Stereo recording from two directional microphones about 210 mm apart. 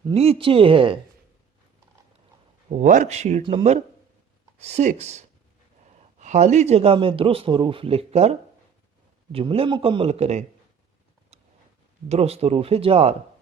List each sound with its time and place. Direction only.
0.1 s a man's voice: 30° right (ahead or behind)
2.6 s a man's voice: 35° right (ahead or behind)
12.0 s a man's voice: 30° right (ahead or behind)